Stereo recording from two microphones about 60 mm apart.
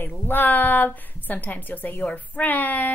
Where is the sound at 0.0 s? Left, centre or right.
Left.